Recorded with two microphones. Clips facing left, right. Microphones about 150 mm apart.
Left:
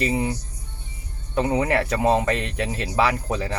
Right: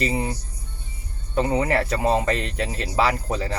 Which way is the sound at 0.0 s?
Centre (ahead or behind).